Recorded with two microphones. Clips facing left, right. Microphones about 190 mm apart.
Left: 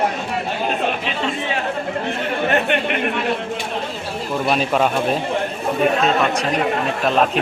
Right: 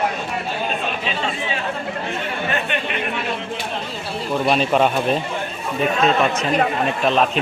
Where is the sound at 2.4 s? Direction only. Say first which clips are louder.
Left 7 dB; 60° left (ahead or behind).